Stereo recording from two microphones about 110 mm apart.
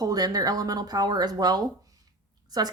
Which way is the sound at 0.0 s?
35° right (ahead or behind).